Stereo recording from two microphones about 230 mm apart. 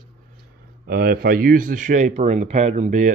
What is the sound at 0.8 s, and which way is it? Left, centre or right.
Speech, right.